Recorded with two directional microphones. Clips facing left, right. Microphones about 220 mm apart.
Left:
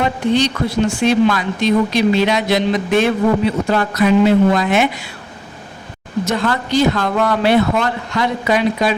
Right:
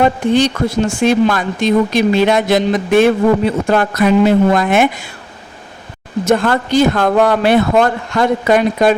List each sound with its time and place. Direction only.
0.0 s speech: 50° right (ahead or behind)
6.2 s speech: 55° right (ahead or behind)